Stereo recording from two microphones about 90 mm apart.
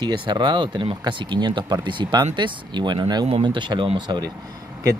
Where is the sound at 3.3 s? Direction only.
65° right (ahead or behind).